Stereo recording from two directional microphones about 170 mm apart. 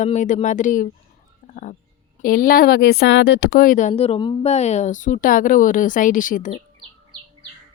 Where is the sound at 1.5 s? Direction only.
50° left (ahead or behind).